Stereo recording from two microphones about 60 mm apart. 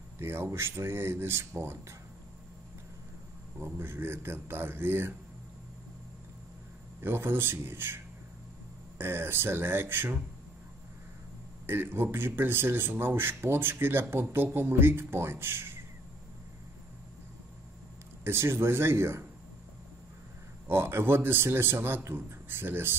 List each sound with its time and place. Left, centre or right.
0.2 s speech: right
3.5 s a man's voice: right
7.0 s a man's voice: right
11.6 s a man's voice: right
18.2 s speech: right
20.6 s a man's voice: right